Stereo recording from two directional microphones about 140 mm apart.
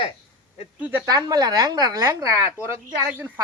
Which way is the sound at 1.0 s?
25° right (ahead or behind).